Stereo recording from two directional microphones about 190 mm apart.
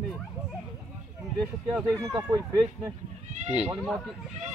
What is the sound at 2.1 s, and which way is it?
Speech, 20° right (ahead or behind).